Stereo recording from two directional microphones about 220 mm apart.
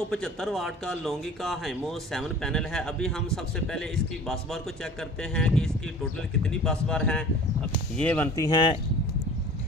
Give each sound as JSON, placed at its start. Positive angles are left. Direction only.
{"t": 0.1, "sound": "speech", "side_deg": 0}
{"t": 8.5, "sound": "speech", "side_deg": 20}